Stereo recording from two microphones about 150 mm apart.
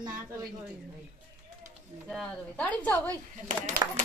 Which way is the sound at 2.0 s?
5° left (ahead or behind).